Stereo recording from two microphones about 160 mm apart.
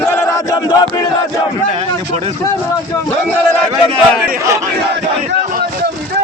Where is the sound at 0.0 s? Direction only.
15° left (ahead or behind).